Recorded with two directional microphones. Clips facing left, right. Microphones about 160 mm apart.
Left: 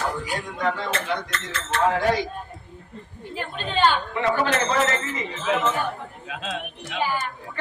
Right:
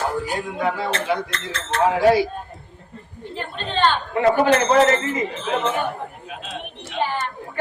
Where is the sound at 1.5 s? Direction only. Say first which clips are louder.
Right 2 dB; 10° right (ahead or behind).